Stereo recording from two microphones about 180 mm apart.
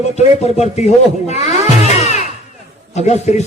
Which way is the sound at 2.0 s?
40° left (ahead or behind).